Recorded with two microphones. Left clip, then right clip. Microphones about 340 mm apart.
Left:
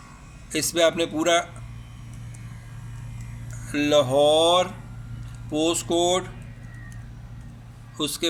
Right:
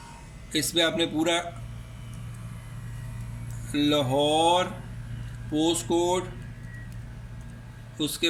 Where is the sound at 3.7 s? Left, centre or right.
Centre.